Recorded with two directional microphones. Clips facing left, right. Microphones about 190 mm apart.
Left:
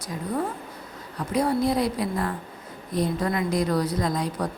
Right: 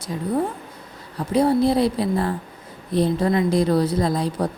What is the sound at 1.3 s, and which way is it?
A woman's voice, 30° right (ahead or behind).